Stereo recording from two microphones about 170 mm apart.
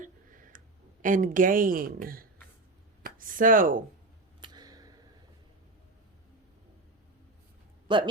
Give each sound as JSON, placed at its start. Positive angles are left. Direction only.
{"t": 0.0, "sound": "tick", "side_deg": -50}
{"t": 1.0, "sound": "a woman's voice", "side_deg": -50}
{"t": 3.0, "sound": "a sound", "side_deg": -55}
{"t": 4.4, "sound": "tick-tock", "side_deg": -25}
{"t": 7.9, "sound": "speech", "side_deg": -30}